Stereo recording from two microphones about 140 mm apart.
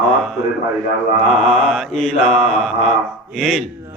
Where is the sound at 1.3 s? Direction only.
Centre (ahead or behind).